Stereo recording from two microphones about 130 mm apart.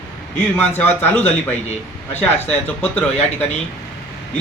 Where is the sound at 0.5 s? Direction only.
15° left (ahead or behind).